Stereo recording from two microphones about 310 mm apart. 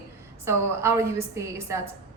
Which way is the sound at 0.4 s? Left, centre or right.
Centre.